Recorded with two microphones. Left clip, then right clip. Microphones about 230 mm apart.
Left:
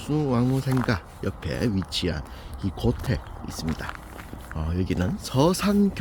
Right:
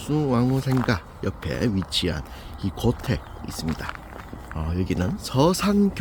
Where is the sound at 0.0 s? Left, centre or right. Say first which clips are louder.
Right 2 dB; centre.